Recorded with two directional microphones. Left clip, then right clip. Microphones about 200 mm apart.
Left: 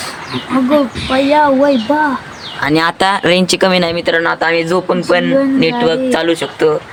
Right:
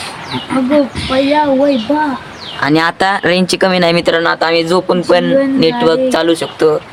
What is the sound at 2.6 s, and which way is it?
Speech, 15° right (ahead or behind).